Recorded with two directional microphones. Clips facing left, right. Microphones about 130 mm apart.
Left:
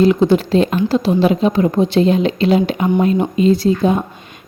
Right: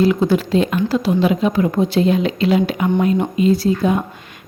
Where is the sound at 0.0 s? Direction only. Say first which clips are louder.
Left 3 dB; 25° left (ahead or behind).